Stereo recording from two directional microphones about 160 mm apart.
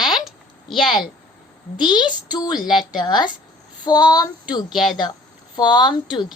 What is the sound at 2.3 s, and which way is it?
Child singing, 25° left (ahead or behind).